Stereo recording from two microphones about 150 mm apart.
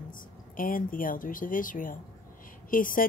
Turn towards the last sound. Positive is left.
turn(degrees=65)  # may be behind; listen again after turning